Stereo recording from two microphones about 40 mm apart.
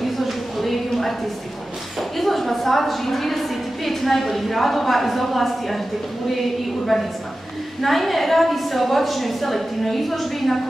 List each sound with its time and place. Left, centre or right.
0.0 s a sound: centre
2.0 s a woman's voice: centre
6.9 s a woman's voice: centre